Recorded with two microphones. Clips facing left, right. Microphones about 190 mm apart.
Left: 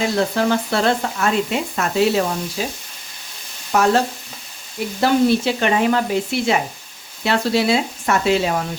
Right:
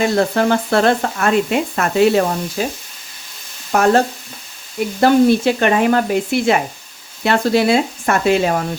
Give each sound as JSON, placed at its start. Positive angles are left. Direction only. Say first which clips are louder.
{"t": 0.0, "sound": "speech", "louder": "right 3 dB", "side_deg": -55}
{"t": 3.7, "sound": "speech", "louder": "right 3 dB", "side_deg": -50}